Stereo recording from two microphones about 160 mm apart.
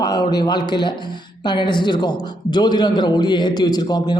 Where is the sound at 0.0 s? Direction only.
25° left (ahead or behind).